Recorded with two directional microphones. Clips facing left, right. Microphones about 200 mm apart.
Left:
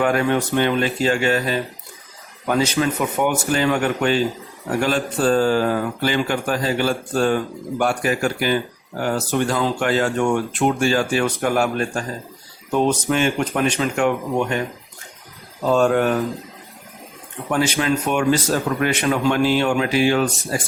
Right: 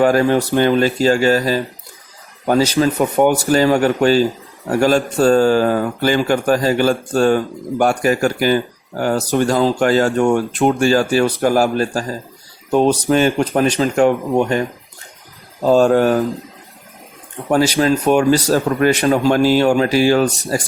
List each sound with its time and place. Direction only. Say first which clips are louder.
0.0 s speech: right 5 dB; 35° right (ahead or behind)
15.6 s speech: right 5 dB; 35° right (ahead or behind)
17.5 s speech: right 5 dB; 35° right (ahead or behind)